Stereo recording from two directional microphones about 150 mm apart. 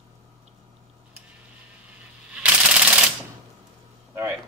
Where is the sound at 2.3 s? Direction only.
5° right (ahead or behind).